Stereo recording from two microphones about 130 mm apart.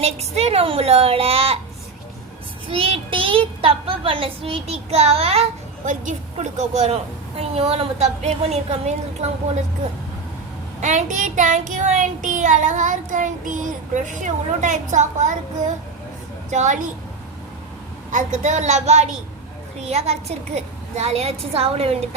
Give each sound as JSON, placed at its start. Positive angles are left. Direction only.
{"t": 0.0, "sound": "a child's voice", "side_deg": -55}
{"t": 2.6, "sound": "a child's voice", "side_deg": -45}
{"t": 5.8, "sound": "a woman's voice", "side_deg": -75}
{"t": 10.8, "sound": "child singing", "side_deg": -65}
{"t": 16.5, "sound": "a woman's voice", "side_deg": -65}
{"t": 18.1, "sound": "a woman's voice", "side_deg": -70}